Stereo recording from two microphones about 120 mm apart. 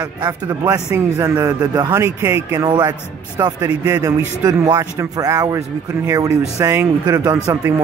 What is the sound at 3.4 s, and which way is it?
Speech, 25° right (ahead or behind).